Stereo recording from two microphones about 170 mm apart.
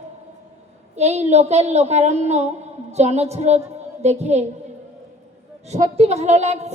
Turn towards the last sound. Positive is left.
turn(degrees=-40)  # may be behind; listen again after turning